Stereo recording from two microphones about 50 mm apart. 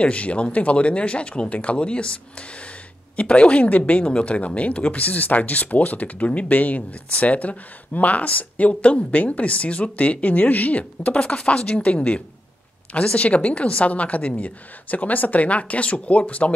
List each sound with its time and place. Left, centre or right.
0.0 s speech: left